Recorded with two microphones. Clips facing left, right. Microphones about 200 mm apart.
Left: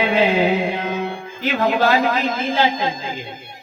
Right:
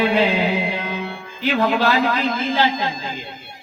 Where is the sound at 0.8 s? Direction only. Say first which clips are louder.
Left 3 dB; 45° left (ahead or behind).